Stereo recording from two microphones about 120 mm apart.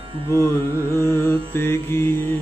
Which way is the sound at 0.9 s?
25° left (ahead or behind).